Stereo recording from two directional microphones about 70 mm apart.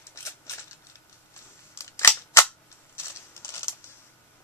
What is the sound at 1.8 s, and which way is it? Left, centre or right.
Scissors, left.